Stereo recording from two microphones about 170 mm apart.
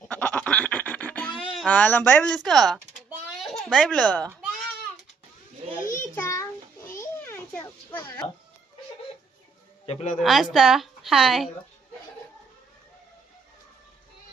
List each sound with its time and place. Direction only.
0.1 s goat: 10° left (ahead or behind)
1.5 s speech: 10° left (ahead or behind)
2.3 s a woman's voice: centre (ahead or behind)
3.3 s a sound: 5° right (ahead or behind)
3.8 s speech: 5° left (ahead or behind)
5.9 s a sound: 15° left (ahead or behind)
9.8 s a woman's voice: 40° left (ahead or behind)
10.2 s a woman's voice: centre (ahead or behind)